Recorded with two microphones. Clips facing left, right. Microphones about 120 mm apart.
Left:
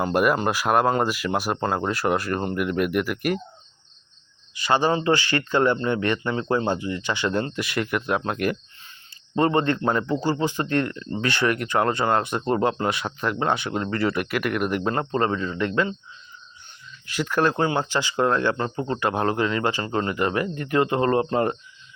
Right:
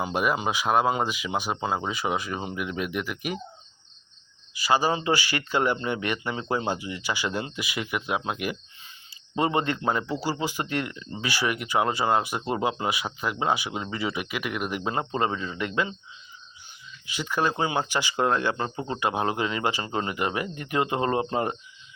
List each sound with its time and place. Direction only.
0.0 s speech: centre (ahead or behind)
4.6 s a man's voice: 10° right (ahead or behind)
14.8 s a man's voice: 15° right (ahead or behind)
17.2 s a man's voice: centre (ahead or behind); by 18.7 s 20° right (ahead or behind)
18.8 s a man's voice: 10° right (ahead or behind)